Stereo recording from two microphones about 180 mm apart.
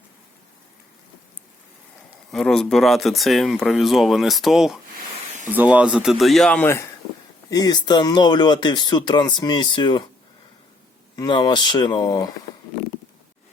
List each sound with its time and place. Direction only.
2.3 s speech: 5° left (ahead or behind)
7.5 s speech: 20° left (ahead or behind)
11.2 s speech: 25° left (ahead or behind)